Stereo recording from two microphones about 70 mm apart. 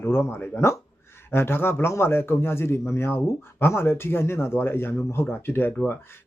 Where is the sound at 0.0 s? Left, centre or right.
Left.